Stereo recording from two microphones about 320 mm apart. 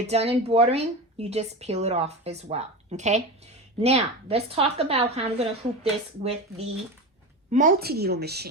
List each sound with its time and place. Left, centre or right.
0.0 s a woman's voice: centre